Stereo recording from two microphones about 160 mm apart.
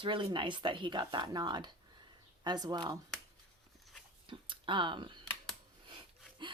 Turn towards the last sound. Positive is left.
turn(degrees=-30)  # may be behind; listen again after turning